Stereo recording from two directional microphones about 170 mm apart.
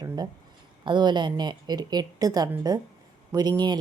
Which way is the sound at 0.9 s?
25° right (ahead or behind).